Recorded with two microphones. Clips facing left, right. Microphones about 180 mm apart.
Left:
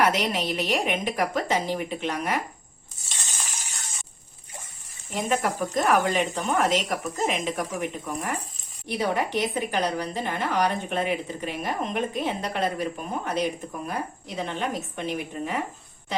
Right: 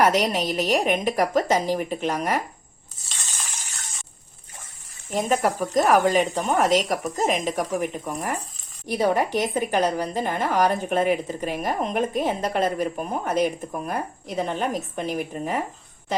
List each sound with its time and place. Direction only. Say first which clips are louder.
0.0 s speech: right 3 dB; 40° right (ahead or behind)
5.1 s speech: right 3 dB; 40° right (ahead or behind)